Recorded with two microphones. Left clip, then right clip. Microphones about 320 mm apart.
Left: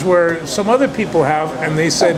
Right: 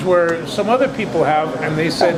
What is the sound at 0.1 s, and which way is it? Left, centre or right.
Speech, left.